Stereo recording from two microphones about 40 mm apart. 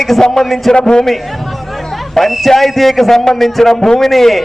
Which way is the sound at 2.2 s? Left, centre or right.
Centre.